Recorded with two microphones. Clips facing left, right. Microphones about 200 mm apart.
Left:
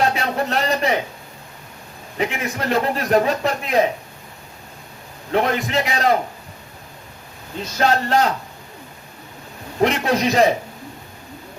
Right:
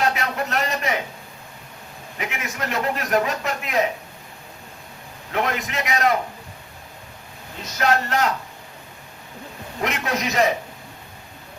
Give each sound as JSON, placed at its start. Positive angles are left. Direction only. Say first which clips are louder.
{"t": 0.0, "sound": "a sound", "louder": "left 3 dB", "side_deg": 30}
{"t": 2.1, "sound": "a man's voice", "louder": "left 7 dB", "side_deg": 30}
{"t": 5.3, "sound": "a man's voice", "louder": "left 5 dB", "side_deg": 30}
{"t": 7.8, "sound": "a man's voice", "louder": "left 3 dB", "side_deg": 30}
{"t": 9.8, "sound": "a man's voice", "louder": "left 7 dB", "side_deg": 30}